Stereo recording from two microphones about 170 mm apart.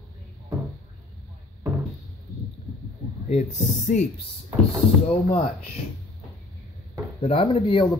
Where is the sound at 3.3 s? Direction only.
45° left (ahead or behind).